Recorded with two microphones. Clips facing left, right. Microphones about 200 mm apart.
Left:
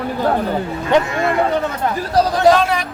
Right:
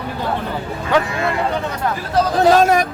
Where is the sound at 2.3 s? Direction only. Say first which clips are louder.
Right 3 dB; 45° right (ahead or behind).